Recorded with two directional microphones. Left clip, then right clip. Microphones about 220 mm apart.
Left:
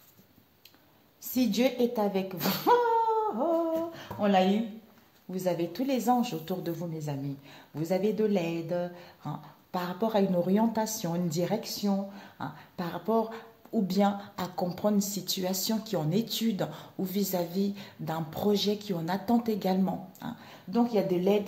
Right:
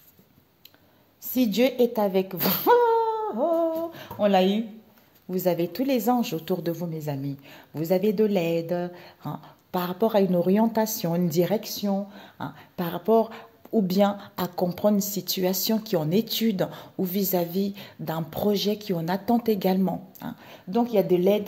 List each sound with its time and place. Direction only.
1.3 s a woman's voice: 40° right (ahead or behind)
3.9 s a sound: 50° right (ahead or behind)
5.3 s a woman's voice: 50° right (ahead or behind)